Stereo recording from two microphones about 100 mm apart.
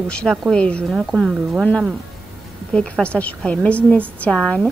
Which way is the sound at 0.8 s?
Centre (ahead or behind).